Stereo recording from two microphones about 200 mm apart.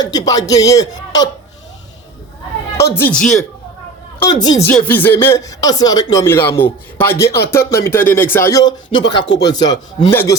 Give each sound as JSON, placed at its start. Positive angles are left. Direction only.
{"t": 0.0, "sound": "speech", "side_deg": 20}
{"t": 2.9, "sound": "speech", "side_deg": 10}
{"t": 4.2, "sound": "speech", "side_deg": 20}
{"t": 4.7, "sound": "speech", "side_deg": 5}